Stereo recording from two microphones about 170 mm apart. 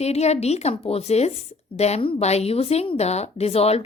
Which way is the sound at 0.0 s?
40° left (ahead or behind).